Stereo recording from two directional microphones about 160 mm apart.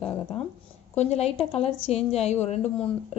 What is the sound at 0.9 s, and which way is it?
A woman's voice, 45° left (ahead or behind).